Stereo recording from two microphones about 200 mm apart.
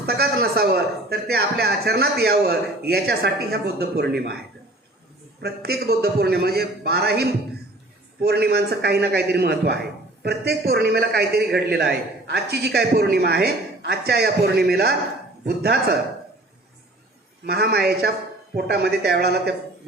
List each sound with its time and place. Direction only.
0.0 s a man's voice: 55° right (ahead or behind)
5.4 s a man's voice: 50° right (ahead or behind)
17.4 s a man's voice: 50° right (ahead or behind)